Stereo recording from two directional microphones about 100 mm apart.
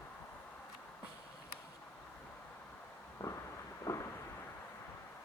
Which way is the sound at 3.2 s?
30° left (ahead or behind).